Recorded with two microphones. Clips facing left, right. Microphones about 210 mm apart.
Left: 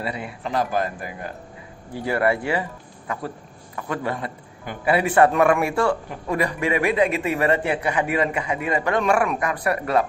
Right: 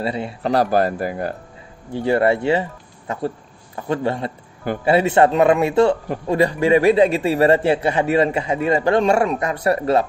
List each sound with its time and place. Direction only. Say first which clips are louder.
0.0 s a man's voice: right 6 dB; 30° right (ahead or behind)